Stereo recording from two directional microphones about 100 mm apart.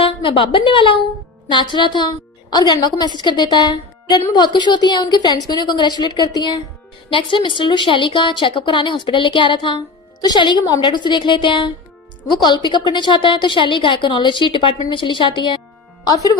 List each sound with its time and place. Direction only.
0.0 s a woman's voice: 60° left (ahead or behind)
7.1 s a woman's voice: 55° left (ahead or behind)
12.3 s a woman's voice: 45° left (ahead or behind)
16.0 s speech: 40° left (ahead or behind)